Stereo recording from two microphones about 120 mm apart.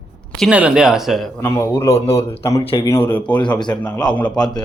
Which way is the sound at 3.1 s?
15° left (ahead or behind).